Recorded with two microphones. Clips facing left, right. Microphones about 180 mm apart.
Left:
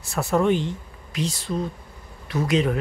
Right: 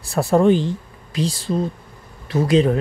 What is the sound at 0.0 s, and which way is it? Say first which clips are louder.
Speech: right 6 dB; 35° right (ahead or behind).